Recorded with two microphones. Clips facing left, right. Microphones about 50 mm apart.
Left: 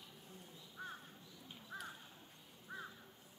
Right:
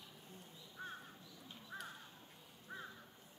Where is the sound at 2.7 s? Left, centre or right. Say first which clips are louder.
Left 1 dB; centre.